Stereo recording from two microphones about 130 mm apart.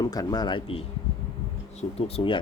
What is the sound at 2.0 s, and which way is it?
Speech, 50° left (ahead or behind).